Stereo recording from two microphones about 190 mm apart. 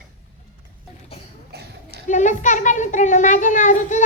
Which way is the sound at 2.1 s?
40° left (ahead or behind).